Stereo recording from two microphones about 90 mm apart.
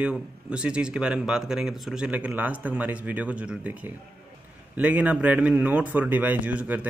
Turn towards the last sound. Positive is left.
turn(degrees=-20)  # may be behind; listen again after turning